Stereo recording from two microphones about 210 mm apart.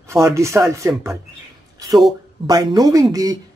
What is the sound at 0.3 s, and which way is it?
Speech, 15° right (ahead or behind).